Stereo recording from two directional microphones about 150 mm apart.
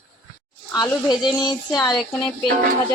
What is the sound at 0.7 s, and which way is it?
Speech, 25° left (ahead or behind).